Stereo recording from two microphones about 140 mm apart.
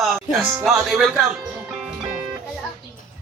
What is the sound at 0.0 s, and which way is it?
Speech, centre (ahead or behind).